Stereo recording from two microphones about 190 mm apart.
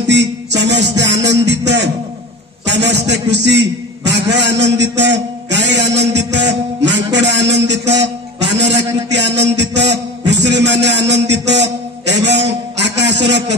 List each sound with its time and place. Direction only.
0.1 s music: 65° right (ahead or behind)
1.2 s a man's voice: 65° right (ahead or behind)